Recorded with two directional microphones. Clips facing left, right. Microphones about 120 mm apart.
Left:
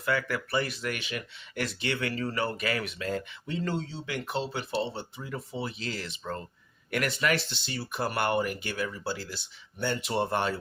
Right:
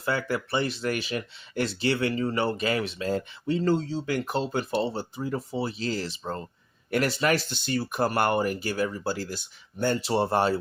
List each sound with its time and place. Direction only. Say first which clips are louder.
0.0 s speech: right 2 dB; 30° right (ahead or behind)